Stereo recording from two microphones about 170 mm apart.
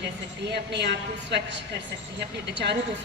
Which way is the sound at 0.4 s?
80° right.